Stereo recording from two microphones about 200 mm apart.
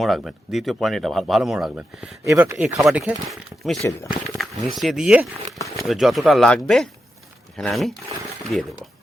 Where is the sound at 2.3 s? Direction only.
15° right (ahead or behind).